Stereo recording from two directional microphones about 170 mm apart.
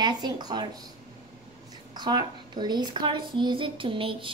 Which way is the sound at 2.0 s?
25° right (ahead or behind).